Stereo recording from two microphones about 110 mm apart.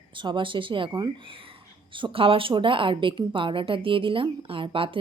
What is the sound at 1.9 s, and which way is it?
A woman's voice, 50° right (ahead or behind).